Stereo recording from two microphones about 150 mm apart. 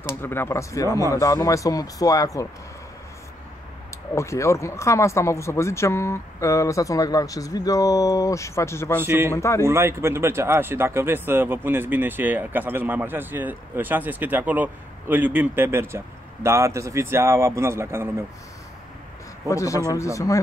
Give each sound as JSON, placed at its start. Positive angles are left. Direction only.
{"t": 0.2, "sound": "speech", "side_deg": 15}
{"t": 4.1, "sound": "speech", "side_deg": 20}
{"t": 9.0, "sound": "speech", "side_deg": -15}
{"t": 9.3, "sound": "speech", "side_deg": 20}
{"t": 9.7, "sound": "speech", "side_deg": -15}
{"t": 19.5, "sound": "speech", "side_deg": 20}